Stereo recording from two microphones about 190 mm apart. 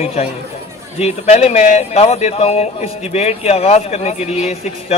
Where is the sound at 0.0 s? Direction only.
35° left (ahead or behind).